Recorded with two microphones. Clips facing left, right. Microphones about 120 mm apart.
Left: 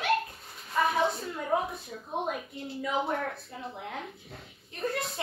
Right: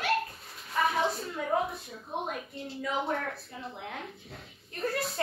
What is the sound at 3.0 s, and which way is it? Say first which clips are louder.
A woman's voice: left 1 dB; 5° left (ahead or behind).